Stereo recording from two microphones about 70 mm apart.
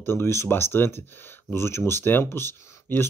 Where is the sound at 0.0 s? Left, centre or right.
Left.